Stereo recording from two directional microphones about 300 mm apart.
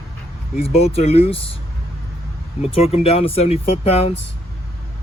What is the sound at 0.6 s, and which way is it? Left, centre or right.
Speech, left.